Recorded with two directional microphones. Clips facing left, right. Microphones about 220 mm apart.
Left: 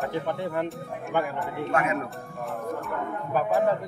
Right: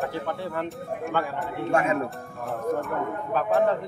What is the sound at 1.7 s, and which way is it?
Speech, 25° right (ahead or behind).